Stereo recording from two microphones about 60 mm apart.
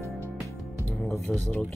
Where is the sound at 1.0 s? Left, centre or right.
Centre.